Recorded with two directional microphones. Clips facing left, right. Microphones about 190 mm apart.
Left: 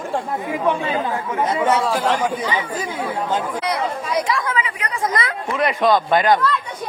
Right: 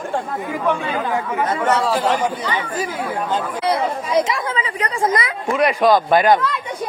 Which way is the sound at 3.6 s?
25° right (ahead or behind).